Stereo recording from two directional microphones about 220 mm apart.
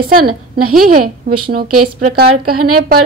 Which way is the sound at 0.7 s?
40° right (ahead or behind).